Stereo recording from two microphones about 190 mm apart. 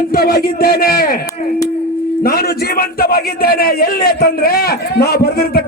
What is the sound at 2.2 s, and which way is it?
A man's voice, 50° left (ahead or behind).